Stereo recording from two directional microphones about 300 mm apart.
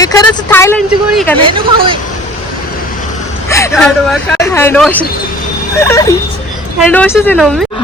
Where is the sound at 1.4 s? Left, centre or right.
Centre.